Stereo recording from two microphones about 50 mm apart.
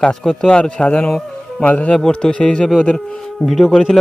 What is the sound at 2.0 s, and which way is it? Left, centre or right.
Speech, centre.